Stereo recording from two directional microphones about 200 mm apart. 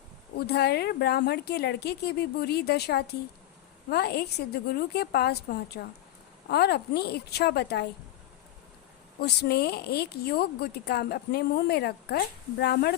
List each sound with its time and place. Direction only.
0.3 s a woman's voice: 55° left (ahead or behind)
9.2 s speech: 55° left (ahead or behind)